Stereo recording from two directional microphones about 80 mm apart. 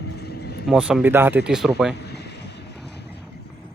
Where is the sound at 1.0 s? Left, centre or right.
Right.